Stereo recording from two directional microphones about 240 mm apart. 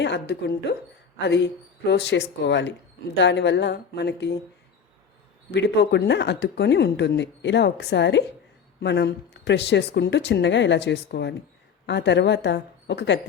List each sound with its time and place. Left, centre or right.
0.0 s a woman's voice: left
5.5 s speech: left